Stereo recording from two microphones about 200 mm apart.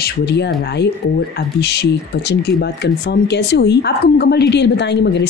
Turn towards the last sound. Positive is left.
turn(degrees=60)  # may be behind; listen again after turning